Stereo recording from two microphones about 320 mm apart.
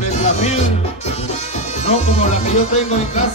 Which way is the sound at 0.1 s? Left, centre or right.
Left.